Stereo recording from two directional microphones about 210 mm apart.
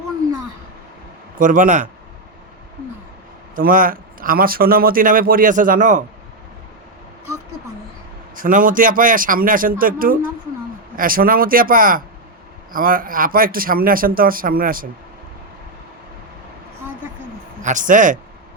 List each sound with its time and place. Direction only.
1.4 s speech: 40° right (ahead or behind)
3.5 s speech: 40° right (ahead or behind)
8.4 s speech: 40° right (ahead or behind)
17.6 s speech: 35° right (ahead or behind)